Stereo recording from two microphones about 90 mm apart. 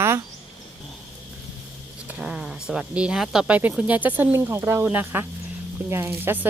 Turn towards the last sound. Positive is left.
turn(degrees=-25)  # may be behind; listen again after turning